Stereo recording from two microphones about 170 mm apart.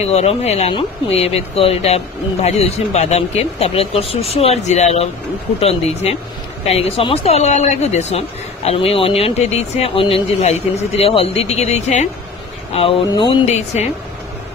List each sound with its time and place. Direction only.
0.1 s speech: 40° left (ahead or behind)
13.1 s speech: 25° left (ahead or behind)
13.5 s speech: 40° left (ahead or behind)